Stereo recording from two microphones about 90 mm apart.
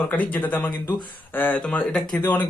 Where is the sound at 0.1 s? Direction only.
20° left (ahead or behind).